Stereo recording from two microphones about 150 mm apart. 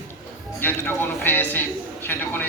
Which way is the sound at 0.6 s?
15° left (ahead or behind).